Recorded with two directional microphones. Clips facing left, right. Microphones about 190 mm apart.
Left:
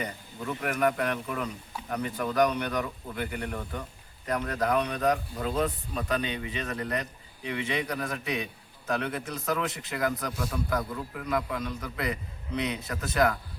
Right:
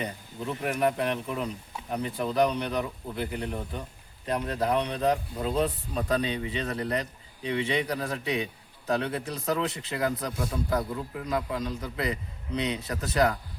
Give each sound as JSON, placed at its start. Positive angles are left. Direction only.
{"t": 0.0, "sound": "a man's voice", "side_deg": -25}